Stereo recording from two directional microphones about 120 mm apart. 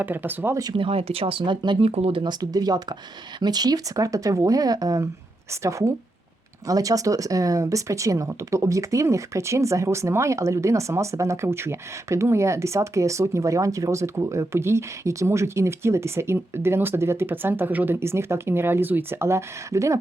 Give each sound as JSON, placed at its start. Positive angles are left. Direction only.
{"t": 0.0, "sound": "speech", "side_deg": -15}
{"t": 0.6, "sound": "speech", "side_deg": -45}
{"t": 1.8, "sound": "speech", "side_deg": -60}
{"t": 2.2, "sound": "speech", "side_deg": -35}